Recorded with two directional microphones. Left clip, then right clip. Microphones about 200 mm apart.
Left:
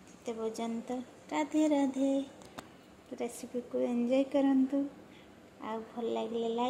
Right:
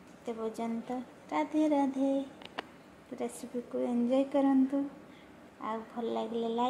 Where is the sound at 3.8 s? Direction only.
10° left (ahead or behind).